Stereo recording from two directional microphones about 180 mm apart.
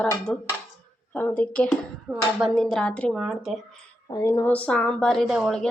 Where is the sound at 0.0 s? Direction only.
5° left (ahead or behind).